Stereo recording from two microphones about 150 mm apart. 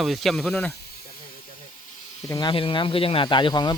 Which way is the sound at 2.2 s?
20° left (ahead or behind).